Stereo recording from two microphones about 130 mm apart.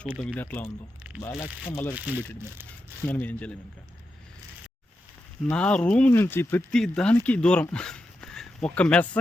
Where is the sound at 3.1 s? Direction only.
10° left (ahead or behind).